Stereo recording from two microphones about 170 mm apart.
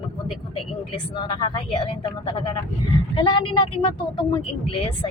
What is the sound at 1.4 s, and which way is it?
A woman's voice, 30° left (ahead or behind).